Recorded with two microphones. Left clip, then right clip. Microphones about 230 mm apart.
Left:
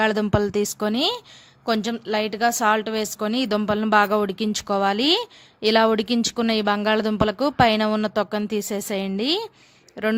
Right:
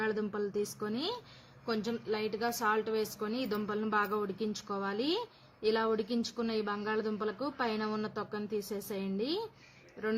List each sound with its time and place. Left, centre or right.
0.0 s a woman's voice: left